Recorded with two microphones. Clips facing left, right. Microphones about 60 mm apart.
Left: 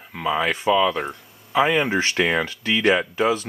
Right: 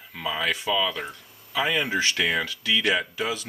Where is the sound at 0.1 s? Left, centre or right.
Left.